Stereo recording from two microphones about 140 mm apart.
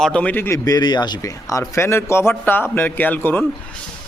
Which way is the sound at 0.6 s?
30° left (ahead or behind).